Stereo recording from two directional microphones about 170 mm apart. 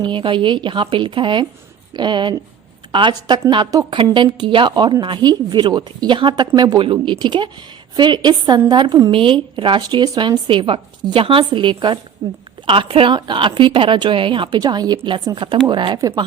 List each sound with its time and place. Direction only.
0.0 s speech: 30° right (ahead or behind)